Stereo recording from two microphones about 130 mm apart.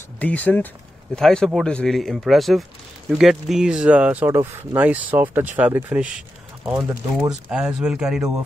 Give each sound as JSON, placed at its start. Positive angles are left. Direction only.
{"t": 0.2, "sound": "speech", "side_deg": 10}
{"t": 6.7, "sound": "speech", "side_deg": -20}
{"t": 7.2, "sound": "speech", "side_deg": -5}